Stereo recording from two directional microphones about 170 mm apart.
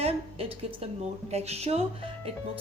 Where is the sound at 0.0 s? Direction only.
35° right (ahead or behind).